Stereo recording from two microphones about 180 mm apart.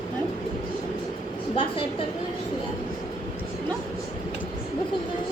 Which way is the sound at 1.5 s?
30° left (ahead or behind).